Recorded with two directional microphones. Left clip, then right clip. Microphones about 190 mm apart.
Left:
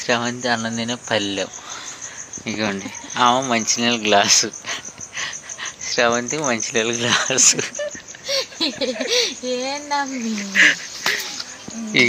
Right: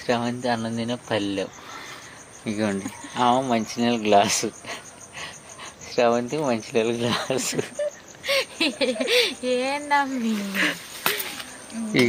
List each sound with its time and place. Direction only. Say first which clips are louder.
0.0 s speech: left 4 dB; 5° left (ahead or behind)
2.5 s speech: left 3 dB; 10° right (ahead or behind)
8.3 s a sound: left 1 dB; 25° right (ahead or behind)
9.0 s speech: left 1 dB; 25° right (ahead or behind)
10.5 s speech: left 12 dB; 5° right (ahead or behind)